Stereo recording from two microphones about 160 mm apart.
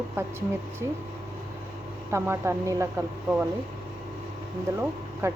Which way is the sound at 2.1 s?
15° right (ahead or behind).